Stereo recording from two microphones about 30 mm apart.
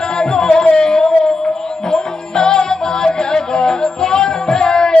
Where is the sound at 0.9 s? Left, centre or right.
Left.